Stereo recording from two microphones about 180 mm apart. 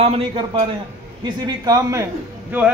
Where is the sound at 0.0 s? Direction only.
30° right (ahead or behind).